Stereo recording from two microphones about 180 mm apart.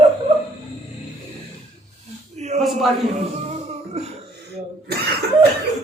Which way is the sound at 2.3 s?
40° right (ahead or behind).